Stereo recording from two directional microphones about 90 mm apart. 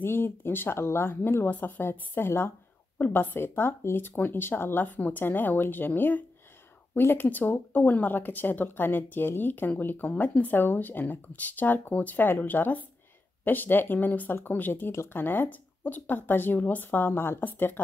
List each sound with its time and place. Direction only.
0.0 s speech: 25° left (ahead or behind)